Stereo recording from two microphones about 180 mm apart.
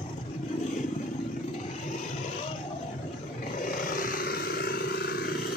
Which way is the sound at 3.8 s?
50° left (ahead or behind).